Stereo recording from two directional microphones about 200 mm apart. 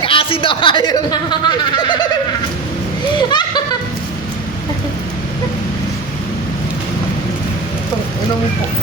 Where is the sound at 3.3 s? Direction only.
20° left (ahead or behind).